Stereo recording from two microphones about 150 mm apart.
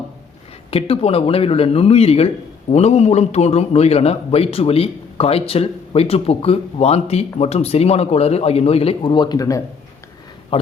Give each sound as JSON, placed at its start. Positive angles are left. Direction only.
{"t": 0.7, "sound": "a man's voice", "side_deg": 40}